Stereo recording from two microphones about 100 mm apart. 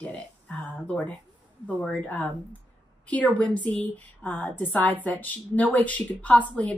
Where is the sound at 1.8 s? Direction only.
15° left (ahead or behind).